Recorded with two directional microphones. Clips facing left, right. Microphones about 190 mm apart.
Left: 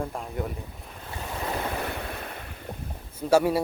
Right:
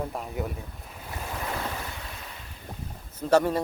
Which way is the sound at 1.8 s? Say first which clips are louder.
Left 7 dB; 60° left (ahead or behind).